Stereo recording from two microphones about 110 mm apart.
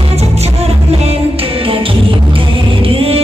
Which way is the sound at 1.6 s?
55° right (ahead or behind).